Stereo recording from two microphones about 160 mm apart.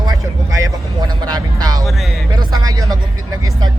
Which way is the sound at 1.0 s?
25° right (ahead or behind).